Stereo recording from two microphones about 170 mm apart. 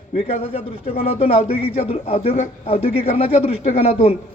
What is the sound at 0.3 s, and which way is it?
A man's voice, 35° left (ahead or behind).